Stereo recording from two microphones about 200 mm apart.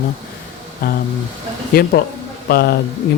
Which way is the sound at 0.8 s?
50° left (ahead or behind).